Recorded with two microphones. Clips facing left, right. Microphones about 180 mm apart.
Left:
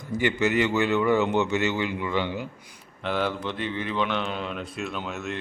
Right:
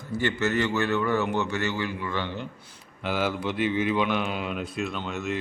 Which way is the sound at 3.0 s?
5° right (ahead or behind).